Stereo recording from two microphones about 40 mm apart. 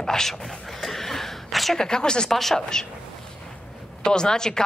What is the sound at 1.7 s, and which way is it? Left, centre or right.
Speech, centre.